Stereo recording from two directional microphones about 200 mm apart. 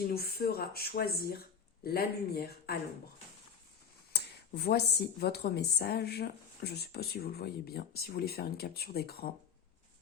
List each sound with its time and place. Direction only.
0.1 s a woman's voice: 50° left (ahead or behind)
4.1 s a woman's voice: 55° left (ahead or behind)